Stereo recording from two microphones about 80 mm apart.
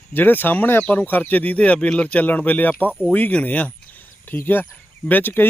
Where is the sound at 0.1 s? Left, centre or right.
Left.